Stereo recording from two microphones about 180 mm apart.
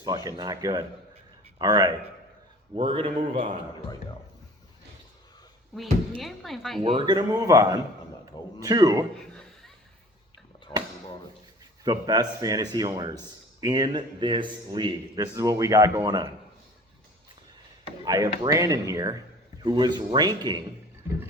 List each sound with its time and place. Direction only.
0.0 s speech: 25° right (ahead or behind)
5.7 s speech: centre (ahead or behind)
6.8 s speech: 25° right (ahead or behind)
10.7 s a sound: 10° left (ahead or behind)
11.9 s speech: 20° right (ahead or behind)
18.0 s speech: 20° right (ahead or behind)